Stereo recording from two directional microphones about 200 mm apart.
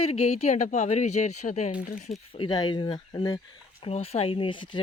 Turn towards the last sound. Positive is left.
turn(degrees=25)  # may be behind; listen again after turning